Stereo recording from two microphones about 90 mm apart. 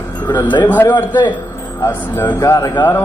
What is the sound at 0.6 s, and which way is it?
A man's voice, 20° left (ahead or behind).